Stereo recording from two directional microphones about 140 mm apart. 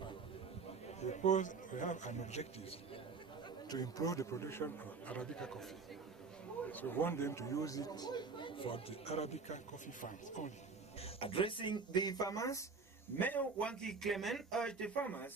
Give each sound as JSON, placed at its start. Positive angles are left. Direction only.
{"t": 1.0, "sound": "a man's voice", "side_deg": 55}
{"t": 3.6, "sound": "a man's voice", "side_deg": 30}
{"t": 5.1, "sound": "a man's voice", "side_deg": 10}
{"t": 6.7, "sound": "a man's voice", "side_deg": 15}
{"t": 11.0, "sound": "speech", "side_deg": 45}
{"t": 13.2, "sound": "speech", "side_deg": 10}